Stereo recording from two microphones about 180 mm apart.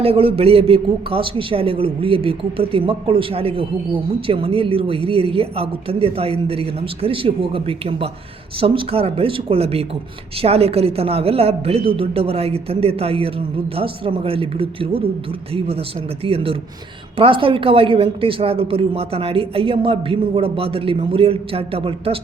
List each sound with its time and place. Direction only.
0.0 s a man's voice: 30° right (ahead or behind)